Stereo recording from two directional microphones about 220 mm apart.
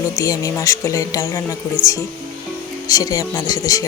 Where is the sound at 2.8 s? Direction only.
15° left (ahead or behind).